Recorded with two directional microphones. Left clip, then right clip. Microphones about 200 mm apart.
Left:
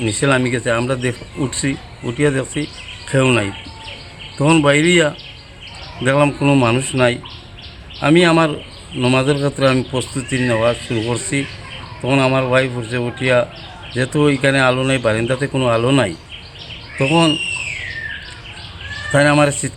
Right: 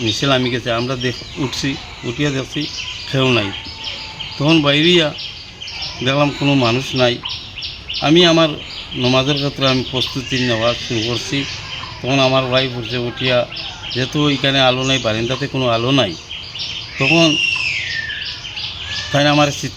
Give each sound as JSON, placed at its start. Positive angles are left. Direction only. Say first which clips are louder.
{"t": 0.0, "sound": "speech", "louder": "even", "side_deg": 25}
{"t": 19.1, "sound": "speech", "louder": "left 1 dB", "side_deg": 25}